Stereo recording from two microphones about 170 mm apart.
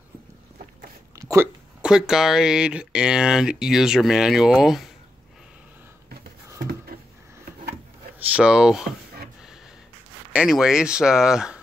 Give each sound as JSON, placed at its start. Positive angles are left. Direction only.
{"t": 1.1, "sound": "hiccup", "side_deg": -15}
{"t": 1.8, "sound": "speech", "side_deg": -5}
{"t": 8.2, "sound": "speech", "side_deg": -10}
{"t": 10.3, "sound": "speech", "side_deg": -5}